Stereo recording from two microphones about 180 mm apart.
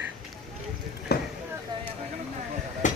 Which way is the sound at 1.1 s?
60° left (ahead or behind).